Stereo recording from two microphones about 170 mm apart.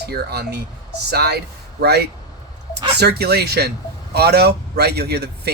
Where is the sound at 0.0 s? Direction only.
70° right (ahead or behind).